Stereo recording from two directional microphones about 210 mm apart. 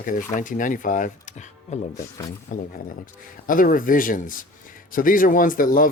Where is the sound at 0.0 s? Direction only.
40° left (ahead or behind).